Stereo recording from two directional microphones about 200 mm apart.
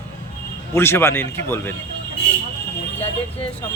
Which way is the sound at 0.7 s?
10° left (ahead or behind).